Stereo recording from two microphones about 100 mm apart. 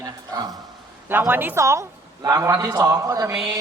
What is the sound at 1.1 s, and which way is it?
A man's voice, 20° right (ahead or behind).